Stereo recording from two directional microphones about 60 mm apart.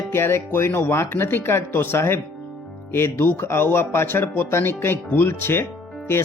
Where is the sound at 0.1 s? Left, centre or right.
Left.